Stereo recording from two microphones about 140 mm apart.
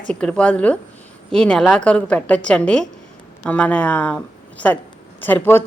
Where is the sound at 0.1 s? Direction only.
5° left (ahead or behind).